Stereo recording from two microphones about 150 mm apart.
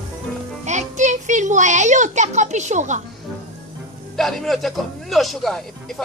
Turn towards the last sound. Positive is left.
turn(degrees=0)  # may be behind; listen again after turning